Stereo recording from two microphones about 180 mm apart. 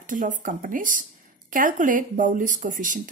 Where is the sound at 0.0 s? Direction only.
45° right (ahead or behind).